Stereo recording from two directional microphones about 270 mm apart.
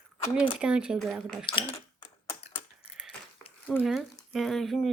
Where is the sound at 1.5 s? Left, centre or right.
Centre.